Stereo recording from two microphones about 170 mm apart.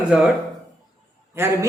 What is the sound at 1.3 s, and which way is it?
Speech, 15° right (ahead or behind).